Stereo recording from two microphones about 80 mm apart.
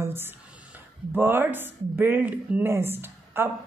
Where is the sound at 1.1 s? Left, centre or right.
Right.